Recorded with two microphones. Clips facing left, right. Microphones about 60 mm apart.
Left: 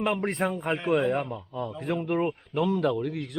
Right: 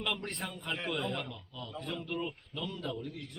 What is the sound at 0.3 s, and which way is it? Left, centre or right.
Speech, left.